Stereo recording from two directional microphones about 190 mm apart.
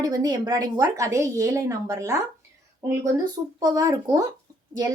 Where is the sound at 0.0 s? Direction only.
20° right (ahead or behind).